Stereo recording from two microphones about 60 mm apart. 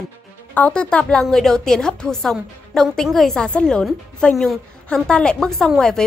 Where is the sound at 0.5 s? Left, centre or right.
Left.